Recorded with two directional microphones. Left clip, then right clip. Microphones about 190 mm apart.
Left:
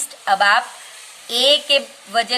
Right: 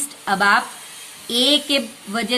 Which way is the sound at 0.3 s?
25° left (ahead or behind).